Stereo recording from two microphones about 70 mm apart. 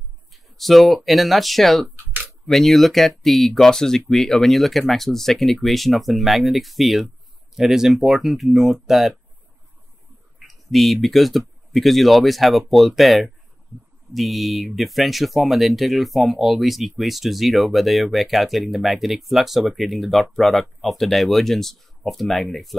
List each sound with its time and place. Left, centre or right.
0.3 s speech: centre
10.4 s speech: centre